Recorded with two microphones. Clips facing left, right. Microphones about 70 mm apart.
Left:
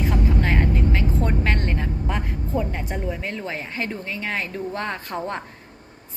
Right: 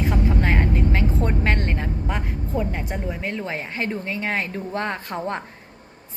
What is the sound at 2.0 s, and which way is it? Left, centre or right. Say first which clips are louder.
A woman's voice: even; centre.